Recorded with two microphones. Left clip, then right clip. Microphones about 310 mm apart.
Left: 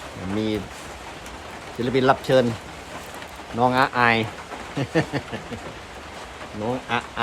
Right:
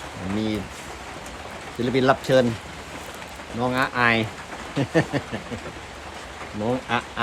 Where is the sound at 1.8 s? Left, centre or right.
Centre.